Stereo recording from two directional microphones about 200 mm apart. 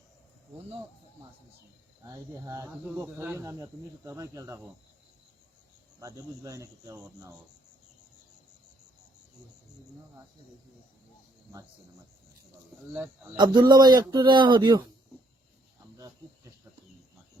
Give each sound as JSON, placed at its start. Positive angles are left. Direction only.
{"t": 2.0, "sound": "speech", "side_deg": -15}
{"t": 6.0, "sound": "speech", "side_deg": -15}
{"t": 13.4, "sound": "a man's voice", "side_deg": -20}